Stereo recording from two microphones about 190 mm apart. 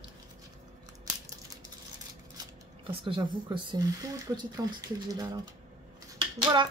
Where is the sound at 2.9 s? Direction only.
25° right (ahead or behind).